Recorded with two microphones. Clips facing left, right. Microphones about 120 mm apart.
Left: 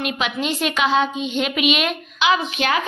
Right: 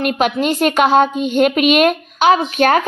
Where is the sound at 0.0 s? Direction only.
45° right (ahead or behind).